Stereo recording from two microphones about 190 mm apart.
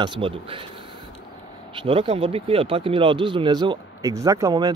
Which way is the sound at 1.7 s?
25° right (ahead or behind).